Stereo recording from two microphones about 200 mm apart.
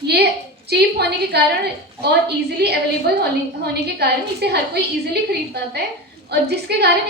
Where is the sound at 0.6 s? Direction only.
55° right (ahead or behind).